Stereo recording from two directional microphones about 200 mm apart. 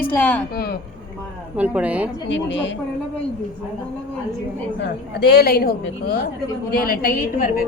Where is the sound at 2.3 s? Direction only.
65° left (ahead or behind).